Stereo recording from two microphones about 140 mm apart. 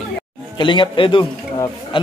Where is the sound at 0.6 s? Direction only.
35° left (ahead or behind).